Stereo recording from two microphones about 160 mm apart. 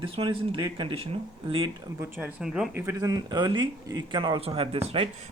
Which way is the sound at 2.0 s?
10° right (ahead or behind).